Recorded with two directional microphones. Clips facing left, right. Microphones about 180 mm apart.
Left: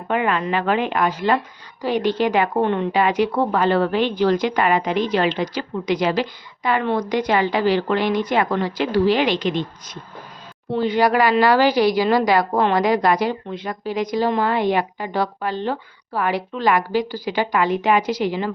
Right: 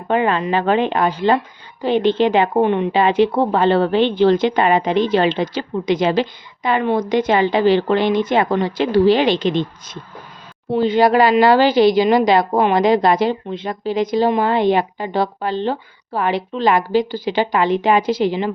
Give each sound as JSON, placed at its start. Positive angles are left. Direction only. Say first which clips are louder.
{"t": 0.1, "sound": "speech", "louder": "right 4 dB", "side_deg": -30}